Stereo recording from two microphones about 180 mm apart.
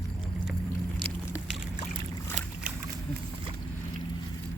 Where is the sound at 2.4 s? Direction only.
45° right (ahead or behind).